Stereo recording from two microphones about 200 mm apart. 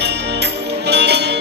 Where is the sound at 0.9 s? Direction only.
55° right (ahead or behind).